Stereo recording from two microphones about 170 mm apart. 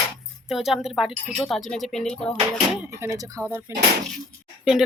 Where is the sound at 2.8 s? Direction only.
15° right (ahead or behind).